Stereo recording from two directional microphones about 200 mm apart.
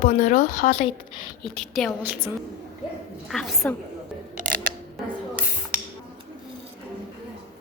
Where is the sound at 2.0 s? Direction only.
10° right (ahead or behind).